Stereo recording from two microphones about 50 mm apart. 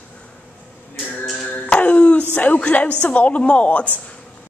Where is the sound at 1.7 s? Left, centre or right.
Left.